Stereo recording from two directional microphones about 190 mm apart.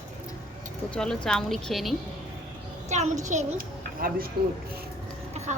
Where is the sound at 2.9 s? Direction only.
35° right (ahead or behind).